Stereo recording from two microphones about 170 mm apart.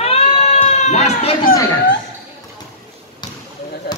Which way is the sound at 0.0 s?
35° left (ahead or behind).